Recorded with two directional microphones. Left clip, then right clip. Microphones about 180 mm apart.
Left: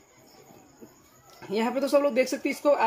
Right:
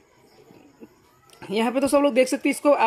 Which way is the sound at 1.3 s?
40° right (ahead or behind).